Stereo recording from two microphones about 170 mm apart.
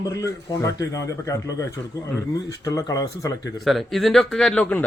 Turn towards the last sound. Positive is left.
turn(degrees=5)  # may be behind; listen again after turning